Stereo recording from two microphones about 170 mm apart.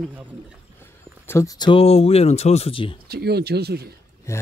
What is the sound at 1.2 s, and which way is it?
Speech, 20° left (ahead or behind).